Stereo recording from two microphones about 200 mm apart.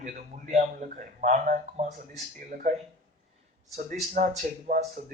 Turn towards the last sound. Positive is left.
turn(degrees=-40)  # may be behind; listen again after turning